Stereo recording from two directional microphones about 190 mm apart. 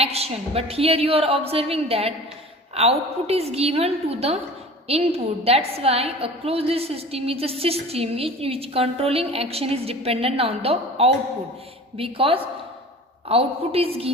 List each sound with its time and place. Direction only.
0.0 s a woman's voice: 30° right (ahead or behind)